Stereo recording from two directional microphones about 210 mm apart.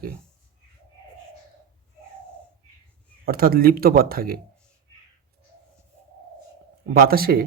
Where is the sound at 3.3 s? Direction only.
45° right (ahead or behind).